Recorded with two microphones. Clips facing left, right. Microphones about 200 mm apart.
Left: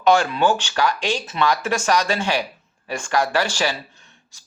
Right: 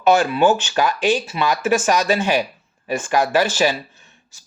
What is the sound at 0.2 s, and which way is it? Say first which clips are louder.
Speech: right 4 dB; 15° right (ahead or behind).